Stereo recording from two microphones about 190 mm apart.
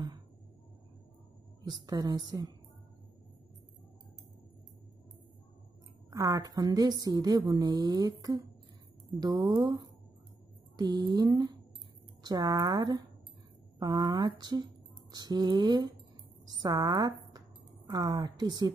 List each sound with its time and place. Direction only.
1.6 s speech: 20° right (ahead or behind)
6.0 s a woman's voice: 20° right (ahead or behind)